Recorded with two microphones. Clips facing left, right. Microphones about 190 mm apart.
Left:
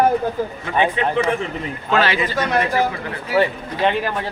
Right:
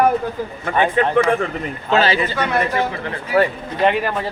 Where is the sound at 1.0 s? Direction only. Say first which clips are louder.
Right 4 dB; 50° right (ahead or behind).